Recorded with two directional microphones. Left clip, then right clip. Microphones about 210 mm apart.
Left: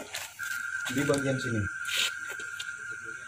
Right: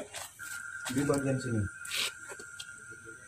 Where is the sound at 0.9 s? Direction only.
25° right (ahead or behind).